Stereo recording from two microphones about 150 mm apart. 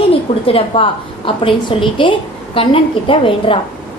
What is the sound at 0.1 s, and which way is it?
A woman's voice, 40° left (ahead or behind).